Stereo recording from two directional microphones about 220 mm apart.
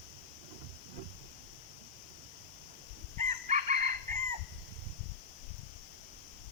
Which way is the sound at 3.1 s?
30° right (ahead or behind).